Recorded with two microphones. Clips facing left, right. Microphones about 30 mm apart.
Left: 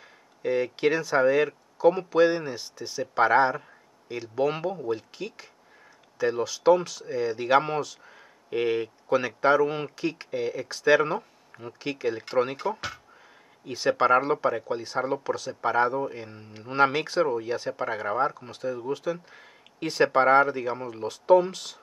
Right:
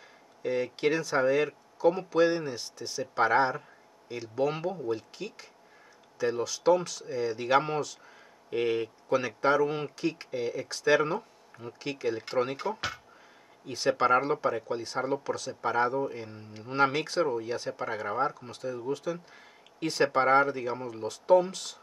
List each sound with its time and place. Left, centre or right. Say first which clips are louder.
0.4 s speech: left 4 dB; centre